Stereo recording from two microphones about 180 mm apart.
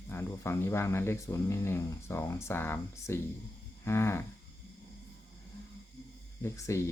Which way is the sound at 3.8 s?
15° left (ahead or behind).